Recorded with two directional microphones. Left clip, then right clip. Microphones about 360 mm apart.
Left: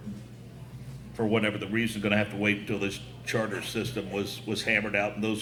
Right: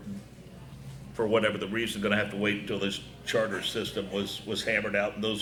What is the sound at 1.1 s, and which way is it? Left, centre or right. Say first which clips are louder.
Speech: right 2 dB; centre.